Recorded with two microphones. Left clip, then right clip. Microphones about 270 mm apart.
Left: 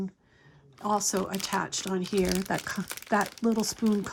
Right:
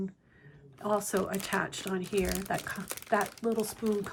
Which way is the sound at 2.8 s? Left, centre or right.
Centre.